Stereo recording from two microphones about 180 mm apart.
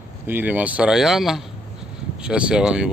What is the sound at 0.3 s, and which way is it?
Speech, 10° right (ahead or behind).